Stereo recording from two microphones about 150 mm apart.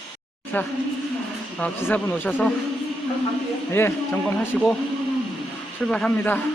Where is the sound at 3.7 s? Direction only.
15° left (ahead or behind).